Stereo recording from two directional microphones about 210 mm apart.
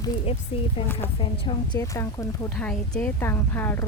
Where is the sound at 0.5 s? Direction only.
25° left (ahead or behind); by 3.9 s 10° left (ahead or behind).